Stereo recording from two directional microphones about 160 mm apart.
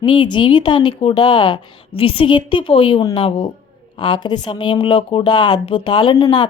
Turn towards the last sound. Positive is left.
turn(degrees=30)  # may be behind; listen again after turning